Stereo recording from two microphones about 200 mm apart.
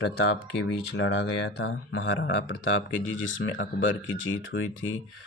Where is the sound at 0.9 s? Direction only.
65° left (ahead or behind).